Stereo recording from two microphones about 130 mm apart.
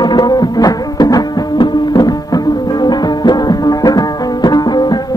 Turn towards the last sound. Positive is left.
turn(degrees=35)  # may be behind; listen again after turning